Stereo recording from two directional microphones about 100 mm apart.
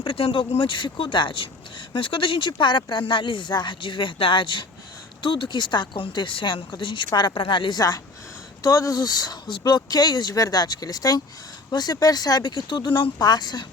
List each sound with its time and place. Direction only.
0.0 s speech: 60° left (ahead or behind); by 13.7 s 45° left (ahead or behind)